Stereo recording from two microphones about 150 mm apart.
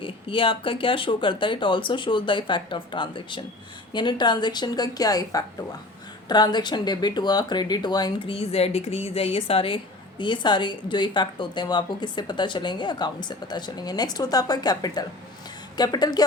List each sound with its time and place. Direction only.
0.0 s a woman's voice: 35° left (ahead or behind)
8.4 s a woman's voice: 45° left (ahead or behind); by 16.2 s 25° left (ahead or behind)